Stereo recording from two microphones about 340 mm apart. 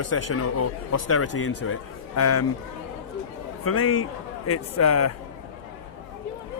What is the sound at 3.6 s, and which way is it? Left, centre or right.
A man's voice, left.